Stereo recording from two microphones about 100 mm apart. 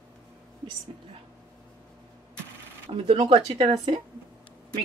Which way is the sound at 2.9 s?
80° right.